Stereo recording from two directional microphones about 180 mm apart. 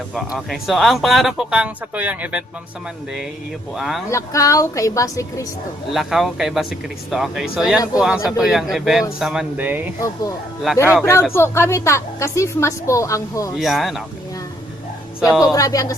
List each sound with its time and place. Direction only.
0.3 s speech: centre (ahead or behind)
3.8 s speech: centre (ahead or behind)
4.1 s a woman's voice: 15° left (ahead or behind)
5.9 s speech: centre (ahead or behind)
11.0 s a woman's voice: 15° left (ahead or behind)
13.6 s speech: centre (ahead or behind)
15.3 s speech: centre (ahead or behind)
15.5 s a woman's voice: 20° left (ahead or behind)